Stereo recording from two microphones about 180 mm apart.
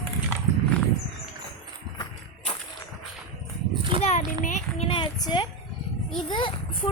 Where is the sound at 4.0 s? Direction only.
40° left (ahead or behind).